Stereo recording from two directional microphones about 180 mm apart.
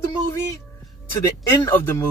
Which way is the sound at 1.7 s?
10° left (ahead or behind).